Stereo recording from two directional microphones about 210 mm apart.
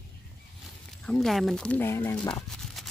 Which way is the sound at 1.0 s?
Centre (ahead or behind).